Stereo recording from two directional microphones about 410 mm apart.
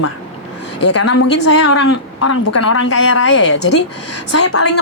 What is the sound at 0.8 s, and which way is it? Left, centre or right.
A woman's voice, left.